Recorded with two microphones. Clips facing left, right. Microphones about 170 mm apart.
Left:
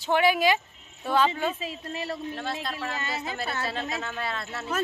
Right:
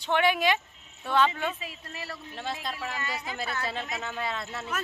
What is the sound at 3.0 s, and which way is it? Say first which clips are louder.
Speech: left 2 dB; 25° left (ahead or behind).